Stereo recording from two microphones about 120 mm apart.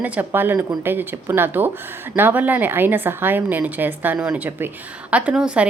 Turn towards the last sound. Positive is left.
turn(degrees=-10)  # may be behind; listen again after turning